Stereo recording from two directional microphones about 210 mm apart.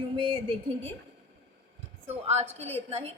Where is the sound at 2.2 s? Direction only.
30° right (ahead or behind).